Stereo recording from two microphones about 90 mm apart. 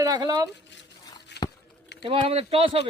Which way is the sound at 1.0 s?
45° left (ahead or behind).